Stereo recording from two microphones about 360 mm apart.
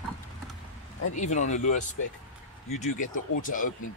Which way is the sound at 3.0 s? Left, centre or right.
Left.